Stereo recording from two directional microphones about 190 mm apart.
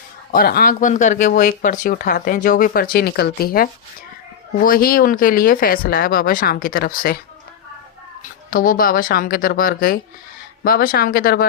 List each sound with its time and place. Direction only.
0.3 s speech: 55° left (ahead or behind)
8.2 s speech: 45° left (ahead or behind)